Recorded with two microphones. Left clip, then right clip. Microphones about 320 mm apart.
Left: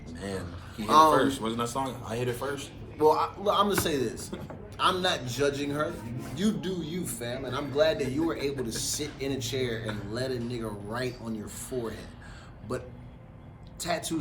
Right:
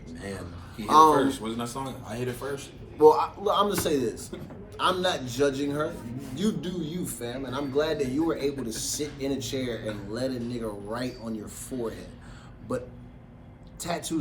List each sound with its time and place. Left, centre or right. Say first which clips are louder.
0.1 s a sound: left 2 dB; centre
0.9 s a man's voice: right 2 dB; centre
1.1 s speech: even; centre
3.0 s a man's voice: right 5 dB; centre